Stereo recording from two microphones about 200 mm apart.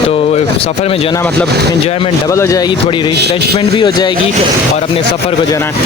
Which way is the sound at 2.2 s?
15° left (ahead or behind).